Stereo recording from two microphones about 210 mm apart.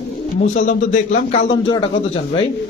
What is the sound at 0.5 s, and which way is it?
Speech, 35° left (ahead or behind).